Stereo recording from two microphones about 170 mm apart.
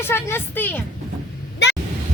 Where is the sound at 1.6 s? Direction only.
90° left.